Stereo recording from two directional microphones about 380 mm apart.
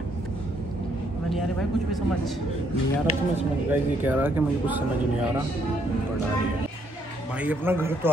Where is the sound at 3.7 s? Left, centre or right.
Centre.